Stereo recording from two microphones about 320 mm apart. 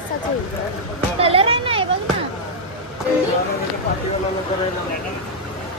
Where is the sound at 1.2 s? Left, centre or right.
Centre.